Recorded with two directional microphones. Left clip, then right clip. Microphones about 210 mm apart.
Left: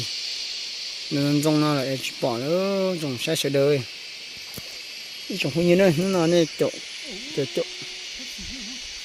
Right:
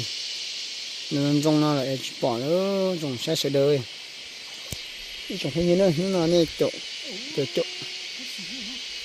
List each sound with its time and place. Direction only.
1.1 s speech: centre (ahead or behind)
5.4 s speech: 15° left (ahead or behind)
6.3 s speech: centre (ahead or behind)